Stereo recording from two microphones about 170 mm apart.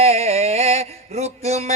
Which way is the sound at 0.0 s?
40° right (ahead or behind).